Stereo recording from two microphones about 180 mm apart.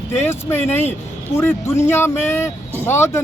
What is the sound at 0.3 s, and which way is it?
Speech, 10° left (ahead or behind).